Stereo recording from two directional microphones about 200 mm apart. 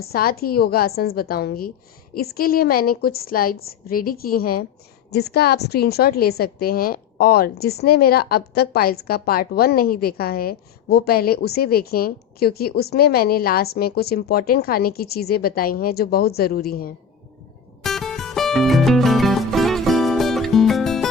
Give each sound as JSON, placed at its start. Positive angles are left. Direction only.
{"t": 0.0, "sound": "a woman's voice", "side_deg": 50}
{"t": 17.8, "sound": "music", "side_deg": 0}